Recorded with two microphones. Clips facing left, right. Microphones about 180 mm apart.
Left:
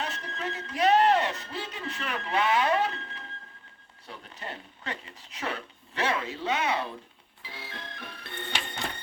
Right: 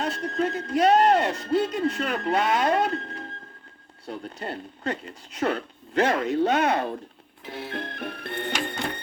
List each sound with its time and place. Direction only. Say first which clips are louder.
0.0 s a sound: right 9 dB; 40° right (ahead or behind)
4.0 s speech: right 8 dB; 40° right (ahead or behind); by 6.9 s 55° right (ahead or behind)
7.4 s music: right 10 dB; 55° right (ahead or behind)